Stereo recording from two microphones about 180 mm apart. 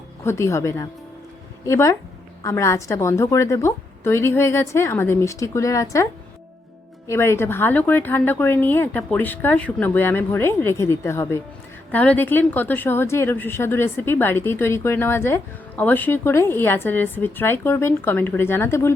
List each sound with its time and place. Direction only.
0.3 s a woman's voice: 15° left (ahead or behind)
7.1 s a woman's voice: 15° left (ahead or behind)